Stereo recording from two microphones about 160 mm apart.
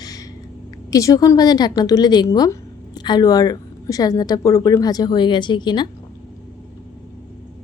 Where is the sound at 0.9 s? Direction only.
20° left (ahead or behind).